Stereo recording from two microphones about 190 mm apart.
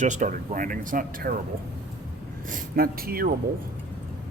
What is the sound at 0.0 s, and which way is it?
Speech, 40° right (ahead or behind).